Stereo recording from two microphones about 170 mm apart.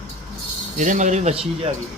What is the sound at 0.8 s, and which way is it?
Speech, 45° right (ahead or behind).